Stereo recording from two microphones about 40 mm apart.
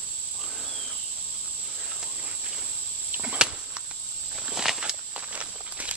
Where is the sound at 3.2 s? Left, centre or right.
Right.